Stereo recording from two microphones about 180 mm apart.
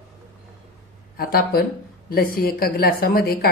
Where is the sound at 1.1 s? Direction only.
55° left (ahead or behind).